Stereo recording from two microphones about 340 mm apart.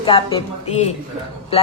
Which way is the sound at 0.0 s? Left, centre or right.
Centre.